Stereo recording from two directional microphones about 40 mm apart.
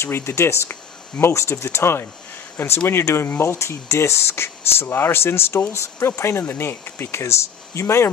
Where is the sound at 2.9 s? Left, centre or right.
Left.